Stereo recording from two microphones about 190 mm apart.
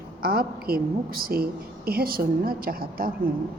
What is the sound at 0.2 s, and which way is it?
A woman's voice, 50° right (ahead or behind).